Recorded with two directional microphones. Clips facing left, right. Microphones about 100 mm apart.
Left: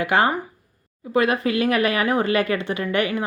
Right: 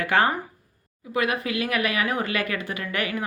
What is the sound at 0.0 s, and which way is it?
Speech, 15° left (ahead or behind).